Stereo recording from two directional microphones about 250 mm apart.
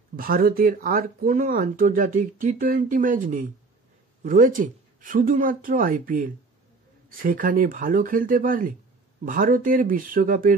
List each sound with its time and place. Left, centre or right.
0.1 s speech: right